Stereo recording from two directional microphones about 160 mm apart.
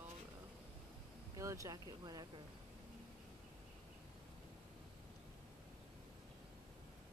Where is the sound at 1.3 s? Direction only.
20° right (ahead or behind).